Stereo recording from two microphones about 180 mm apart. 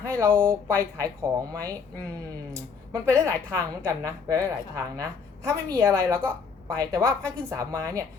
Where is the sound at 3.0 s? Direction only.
15° right (ahead or behind).